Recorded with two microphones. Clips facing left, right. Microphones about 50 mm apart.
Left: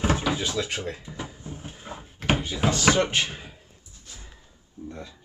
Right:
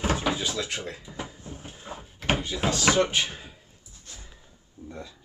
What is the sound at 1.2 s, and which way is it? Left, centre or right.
Cupboard open or close, centre.